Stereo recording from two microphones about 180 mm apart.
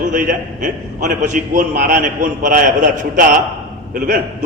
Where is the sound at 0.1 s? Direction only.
50° right (ahead or behind).